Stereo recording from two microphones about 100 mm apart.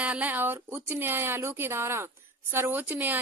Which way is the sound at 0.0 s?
15° right (ahead or behind).